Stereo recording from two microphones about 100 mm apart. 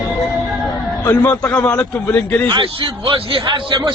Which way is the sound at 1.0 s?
15° left (ahead or behind).